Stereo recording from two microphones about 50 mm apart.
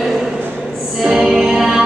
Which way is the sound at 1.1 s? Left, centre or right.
Centre.